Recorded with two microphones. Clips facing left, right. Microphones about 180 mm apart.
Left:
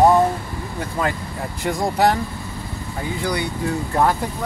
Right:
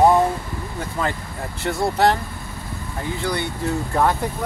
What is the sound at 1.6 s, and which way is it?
Speech, 15° left (ahead or behind).